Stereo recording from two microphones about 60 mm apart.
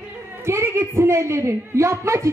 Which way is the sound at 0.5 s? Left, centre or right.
Right.